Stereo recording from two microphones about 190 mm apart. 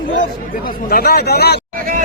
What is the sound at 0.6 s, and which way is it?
Speech, 55° left (ahead or behind).